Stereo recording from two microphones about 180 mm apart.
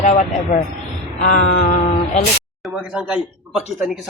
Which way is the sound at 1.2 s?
45° left (ahead or behind).